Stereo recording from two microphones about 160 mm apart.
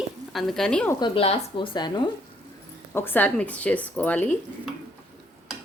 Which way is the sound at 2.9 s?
15° left (ahead or behind).